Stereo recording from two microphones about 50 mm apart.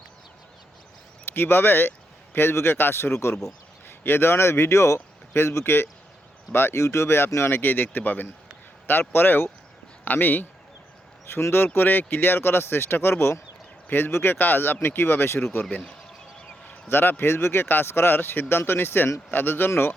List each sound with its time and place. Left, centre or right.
1.3 s speech: left
3.8 s speech: left
11.3 s speech: left
13.8 s speech: left
14.1 s speech: left
14.3 s speech: left
16.9 s speech: left